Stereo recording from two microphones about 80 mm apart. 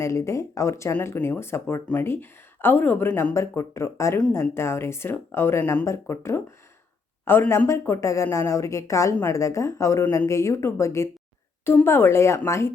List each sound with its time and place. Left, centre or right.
0.0 s speech: left
3.3 s speech: left
7.7 s speech: left